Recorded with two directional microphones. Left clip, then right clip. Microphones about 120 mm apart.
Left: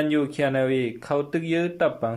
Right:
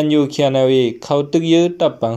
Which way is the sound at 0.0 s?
20° right (ahead or behind).